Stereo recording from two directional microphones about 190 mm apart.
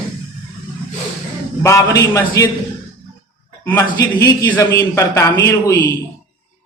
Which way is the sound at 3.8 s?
20° left (ahead or behind).